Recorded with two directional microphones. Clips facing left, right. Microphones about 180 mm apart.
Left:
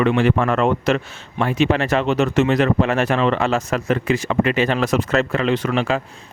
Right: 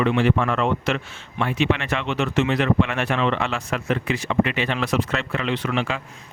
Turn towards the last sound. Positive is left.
turn(degrees=40)  # may be behind; listen again after turning